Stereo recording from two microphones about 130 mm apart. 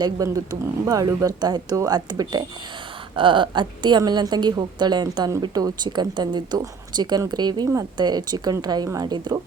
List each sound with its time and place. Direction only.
0.0 s a woman's voice: 25° right (ahead or behind)